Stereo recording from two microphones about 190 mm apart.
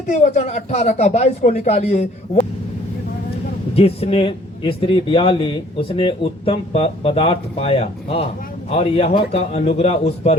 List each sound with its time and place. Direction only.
0.1 s a man's voice: 35° left (ahead or behind)
3.8 s a man's voice: 30° left (ahead or behind)